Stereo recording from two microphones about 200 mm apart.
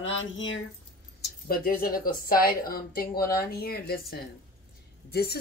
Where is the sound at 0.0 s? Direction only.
70° left (ahead or behind).